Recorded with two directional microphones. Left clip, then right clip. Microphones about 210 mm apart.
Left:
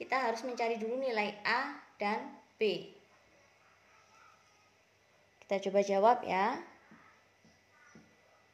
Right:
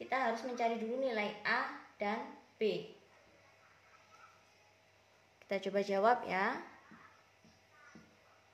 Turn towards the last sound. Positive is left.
turn(degrees=20)  # may be behind; listen again after turning